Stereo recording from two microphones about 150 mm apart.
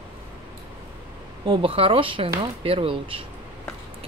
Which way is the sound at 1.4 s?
35° right (ahead or behind).